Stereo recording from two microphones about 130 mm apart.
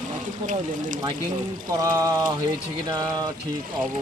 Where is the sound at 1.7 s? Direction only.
30° right (ahead or behind).